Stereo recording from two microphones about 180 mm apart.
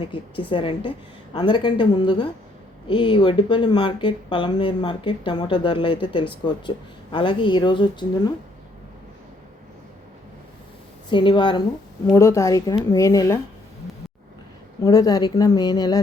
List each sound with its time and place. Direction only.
0.0 s speech: 30° left (ahead or behind)
11.1 s a woman's voice: 25° left (ahead or behind)
14.8 s speech: 20° left (ahead or behind)